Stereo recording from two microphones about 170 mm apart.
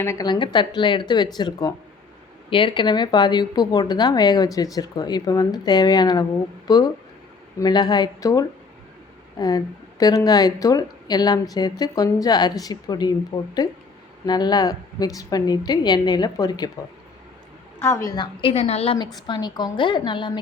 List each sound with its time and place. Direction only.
0.0 s speech: 20° left (ahead or behind)
17.8 s speech: 20° left (ahead or behind)